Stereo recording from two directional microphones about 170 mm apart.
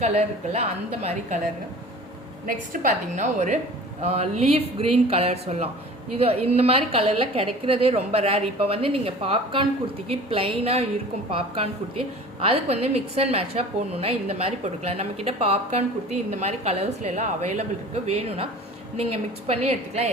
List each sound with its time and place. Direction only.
0.5 s a woman's voice: 40° right (ahead or behind)
2.8 s a woman's voice: 45° right (ahead or behind)